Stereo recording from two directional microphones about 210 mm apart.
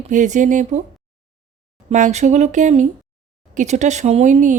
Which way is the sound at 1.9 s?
35° right (ahead or behind).